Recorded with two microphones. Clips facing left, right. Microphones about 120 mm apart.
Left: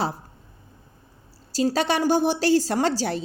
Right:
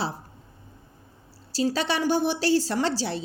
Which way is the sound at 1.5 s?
45° left (ahead or behind).